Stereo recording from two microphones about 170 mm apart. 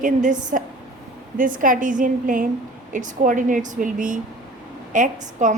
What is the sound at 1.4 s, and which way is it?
A woman's voice, 50° right (ahead or behind).